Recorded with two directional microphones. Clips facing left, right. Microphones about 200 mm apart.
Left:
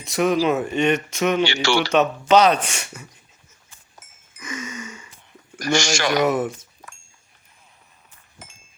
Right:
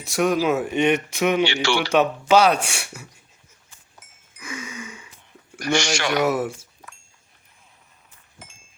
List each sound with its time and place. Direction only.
0.0 s speech: centre (ahead or behind)
0.7 s speech: 15° right (ahead or behind)
1.5 s speech: 40° left (ahead or behind)
1.9 s speech: 10° right (ahead or behind)
4.0 s goat: 45° left (ahead or behind)
4.4 s a sound: 10° right (ahead or behind)
5.5 s speech: 40° left (ahead or behind)
6.2 s speech: 5° right (ahead or behind)